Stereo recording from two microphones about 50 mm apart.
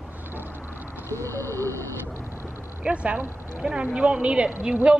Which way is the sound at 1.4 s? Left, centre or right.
Right.